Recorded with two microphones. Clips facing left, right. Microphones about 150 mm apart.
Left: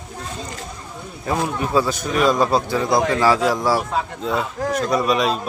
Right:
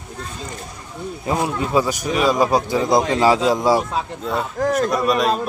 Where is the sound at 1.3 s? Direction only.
20° right (ahead or behind).